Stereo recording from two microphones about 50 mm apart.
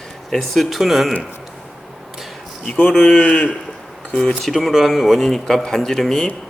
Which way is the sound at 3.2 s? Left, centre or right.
Left.